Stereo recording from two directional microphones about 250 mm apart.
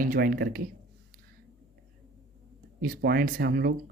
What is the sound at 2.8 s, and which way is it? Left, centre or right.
Speech, right.